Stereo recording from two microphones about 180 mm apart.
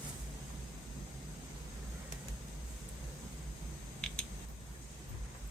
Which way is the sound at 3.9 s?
5° left (ahead or behind).